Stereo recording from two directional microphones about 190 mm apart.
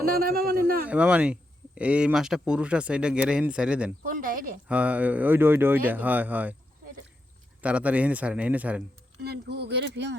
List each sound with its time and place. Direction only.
0.0 s a man's voice: 50° right (ahead or behind)
0.9 s speech: 5° right (ahead or behind)
4.0 s a man's voice: 45° right (ahead or behind)
4.7 s speech: 5° right (ahead or behind)
7.6 s speech: 5° right (ahead or behind)
9.2 s speech: 60° right (ahead or behind)